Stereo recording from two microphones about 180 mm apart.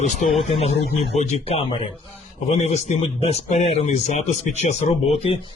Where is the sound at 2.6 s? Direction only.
40° left (ahead or behind).